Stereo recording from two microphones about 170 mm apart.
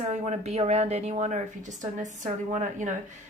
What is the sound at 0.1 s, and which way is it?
Speech, 40° right (ahead or behind).